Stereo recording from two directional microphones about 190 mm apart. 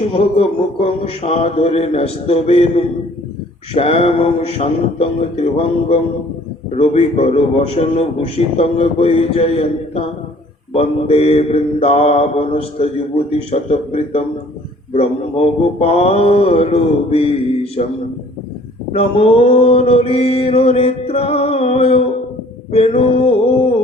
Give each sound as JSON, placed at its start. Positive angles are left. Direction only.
{"t": 0.1, "sound": "mantra", "side_deg": 30}
{"t": 18.9, "sound": "mantra", "side_deg": 30}